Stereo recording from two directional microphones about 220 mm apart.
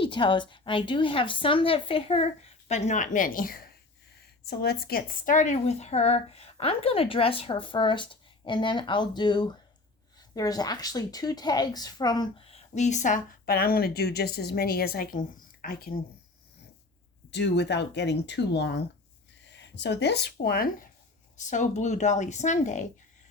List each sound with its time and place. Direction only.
0.0 s a woman's voice: 20° left (ahead or behind); by 16.0 s 40° left (ahead or behind)
17.3 s speech: 50° left (ahead or behind); by 22.9 s 35° left (ahead or behind)